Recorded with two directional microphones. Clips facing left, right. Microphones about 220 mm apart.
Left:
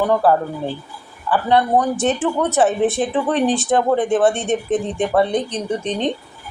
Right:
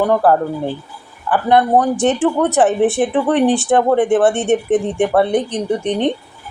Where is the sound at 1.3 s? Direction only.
15° right (ahead or behind).